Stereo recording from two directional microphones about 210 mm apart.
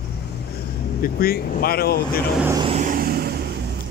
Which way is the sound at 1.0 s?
45° left (ahead or behind).